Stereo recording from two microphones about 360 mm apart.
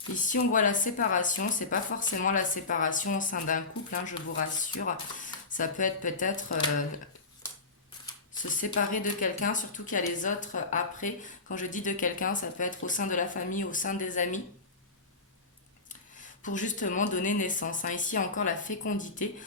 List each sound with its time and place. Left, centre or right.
0.1 s speech: left
8.4 s speech: left
16.4 s speech: left